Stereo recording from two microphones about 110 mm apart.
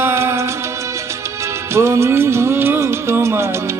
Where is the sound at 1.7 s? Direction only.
25° right (ahead or behind).